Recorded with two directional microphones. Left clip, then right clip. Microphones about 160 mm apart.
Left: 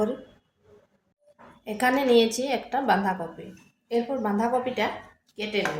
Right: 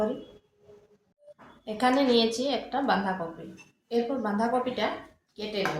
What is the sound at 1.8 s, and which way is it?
A woman's voice, 40° left (ahead or behind).